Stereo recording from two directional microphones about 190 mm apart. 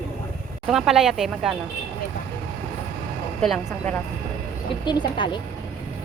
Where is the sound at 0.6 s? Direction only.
Centre (ahead or behind).